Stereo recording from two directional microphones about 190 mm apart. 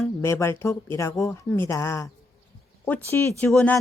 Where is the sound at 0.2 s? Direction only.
15° left (ahead or behind).